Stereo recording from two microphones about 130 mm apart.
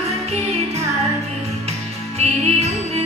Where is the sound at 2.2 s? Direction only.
55° right (ahead or behind).